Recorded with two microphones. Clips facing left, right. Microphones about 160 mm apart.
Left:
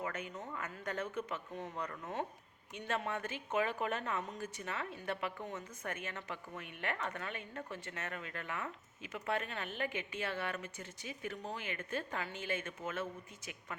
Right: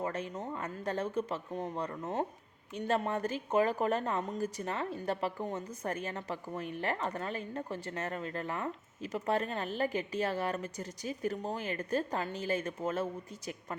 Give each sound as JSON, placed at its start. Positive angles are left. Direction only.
{"t": 0.0, "sound": "a woman's voice", "side_deg": -30}